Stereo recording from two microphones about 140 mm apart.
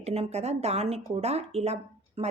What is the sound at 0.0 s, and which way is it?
Speech, 50° right (ahead or behind).